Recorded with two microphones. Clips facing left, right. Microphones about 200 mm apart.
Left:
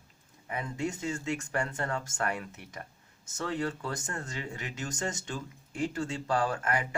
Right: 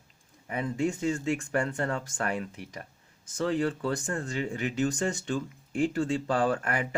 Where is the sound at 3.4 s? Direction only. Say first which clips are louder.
Right 5 dB; 35° right (ahead or behind).